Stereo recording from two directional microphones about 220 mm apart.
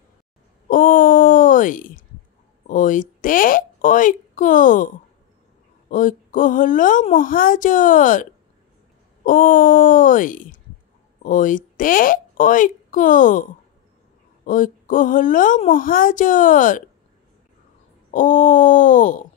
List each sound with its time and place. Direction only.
0.7 s a sound: 40° left (ahead or behind)
2.7 s a woman's voice: 35° left (ahead or behind)
18.1 s a woman's voice: 35° left (ahead or behind)